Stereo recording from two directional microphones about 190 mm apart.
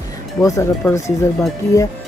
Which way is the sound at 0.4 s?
15° left (ahead or behind).